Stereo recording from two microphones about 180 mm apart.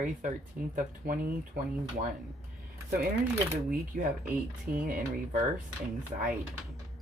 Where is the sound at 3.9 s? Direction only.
55° right (ahead or behind).